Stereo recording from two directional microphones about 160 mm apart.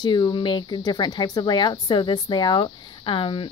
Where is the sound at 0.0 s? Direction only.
30° left (ahead or behind).